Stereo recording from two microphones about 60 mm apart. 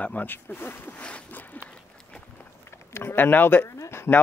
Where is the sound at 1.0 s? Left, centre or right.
Left.